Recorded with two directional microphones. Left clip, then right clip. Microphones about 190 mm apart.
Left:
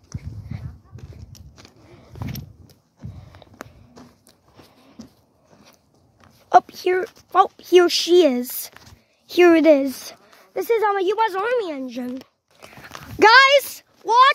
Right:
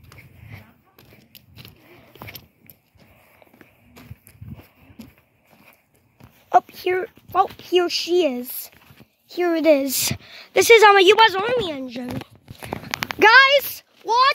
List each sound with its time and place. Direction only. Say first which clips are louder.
0.5 s a sound: left 2 dB; 5° left (ahead or behind)
6.5 s speech: left 2 dB; 10° left (ahead or behind)
9.3 s a woman's voice: left 8 dB; 30° left (ahead or behind)
9.6 s speech: left 2 dB; 15° left (ahead or behind)
10.7 s a woman's voice: right 8 dB; 15° right (ahead or behind)
11.2 s speech: right 3 dB; 5° right (ahead or behind)
11.8 s speech: left 1 dB; 15° left (ahead or behind)
13.2 s speech: left 1 dB; 10° left (ahead or behind)
13.7 s a sound: left 3 dB; 10° left (ahead or behind)